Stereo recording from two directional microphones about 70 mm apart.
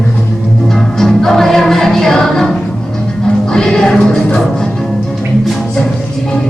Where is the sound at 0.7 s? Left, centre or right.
Centre.